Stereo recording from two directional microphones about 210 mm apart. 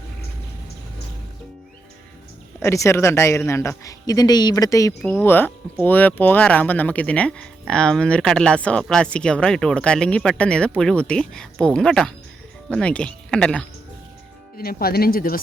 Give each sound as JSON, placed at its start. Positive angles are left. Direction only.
{"t": 2.6, "sound": "a man's voice", "side_deg": 15}
{"t": 14.6, "sound": "speech", "side_deg": 45}